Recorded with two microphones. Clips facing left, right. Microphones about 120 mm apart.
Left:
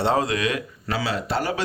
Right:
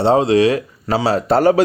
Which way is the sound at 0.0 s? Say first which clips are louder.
Right 9 dB; 30° right (ahead or behind).